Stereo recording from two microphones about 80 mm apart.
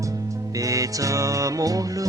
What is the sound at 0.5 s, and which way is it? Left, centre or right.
Music, right.